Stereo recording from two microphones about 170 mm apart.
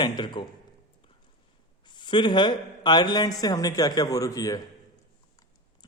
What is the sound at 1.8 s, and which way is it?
A man's voice, 25° left (ahead or behind).